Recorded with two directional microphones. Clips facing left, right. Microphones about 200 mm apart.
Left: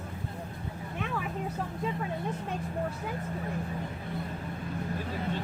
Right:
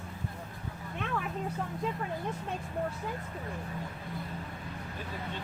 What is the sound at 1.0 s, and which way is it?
Speech, 5° left (ahead or behind).